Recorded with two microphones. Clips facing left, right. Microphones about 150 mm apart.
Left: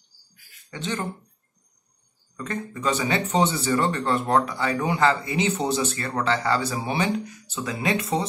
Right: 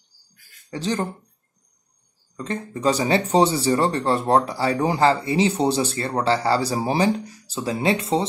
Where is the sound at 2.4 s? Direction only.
30° right (ahead or behind).